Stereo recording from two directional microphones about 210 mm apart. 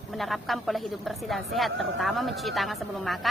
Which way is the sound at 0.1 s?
Centre (ahead or behind).